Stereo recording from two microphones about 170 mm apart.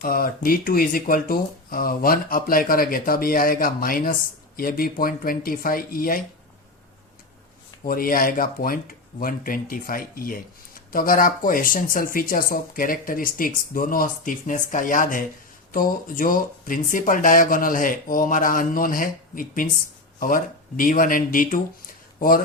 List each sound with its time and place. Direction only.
0.0 s speech: 60° left (ahead or behind)
7.9 s speech: 60° left (ahead or behind)